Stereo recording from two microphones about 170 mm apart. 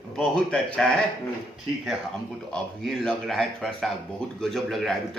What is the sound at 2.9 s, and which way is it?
Speech, centre (ahead or behind).